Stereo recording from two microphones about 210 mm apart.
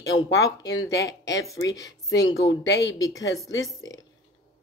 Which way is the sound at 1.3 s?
15° left (ahead or behind).